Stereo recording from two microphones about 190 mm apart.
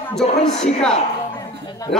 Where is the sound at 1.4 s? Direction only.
20° left (ahead or behind).